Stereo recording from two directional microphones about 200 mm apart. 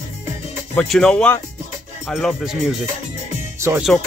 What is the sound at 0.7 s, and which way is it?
Speech, 5° left (ahead or behind).